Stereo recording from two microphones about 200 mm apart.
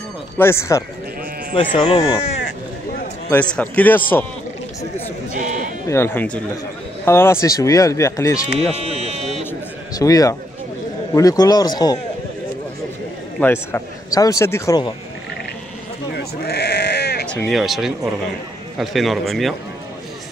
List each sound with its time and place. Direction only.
0.4 s a man's voice: 15° left (ahead or behind)
1.5 s a man's voice: 25° left (ahead or behind)
3.5 s a man's voice: 10° left (ahead or behind)
5.3 s sheep: 40° right (ahead or behind)
5.9 s a man's voice: 10° left (ahead or behind)
8.8 s buzzer: 30° right (ahead or behind)
9.5 s a sound: 15° left (ahead or behind)
11.1 s a man's voice: 20° left (ahead or behind)
13.4 s a man's voice: 10° left (ahead or behind)
16.1 s sheep: 50° left (ahead or behind)
17.3 s speech: 5° left (ahead or behind)